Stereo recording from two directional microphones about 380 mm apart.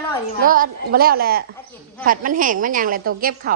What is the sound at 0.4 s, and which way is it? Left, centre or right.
A woman's voice, right.